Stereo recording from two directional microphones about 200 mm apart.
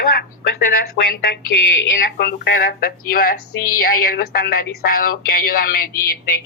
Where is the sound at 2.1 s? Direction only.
55° left (ahead or behind).